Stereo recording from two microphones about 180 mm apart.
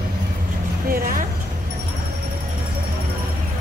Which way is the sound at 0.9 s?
55° right (ahead or behind).